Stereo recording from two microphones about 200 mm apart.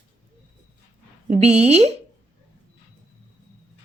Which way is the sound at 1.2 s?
35° right (ahead or behind).